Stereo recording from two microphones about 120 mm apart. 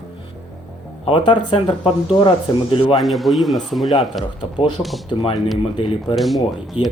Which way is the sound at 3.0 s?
Centre (ahead or behind).